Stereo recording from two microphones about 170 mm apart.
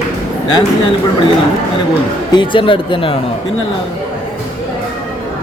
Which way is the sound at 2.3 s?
30° left (ahead or behind).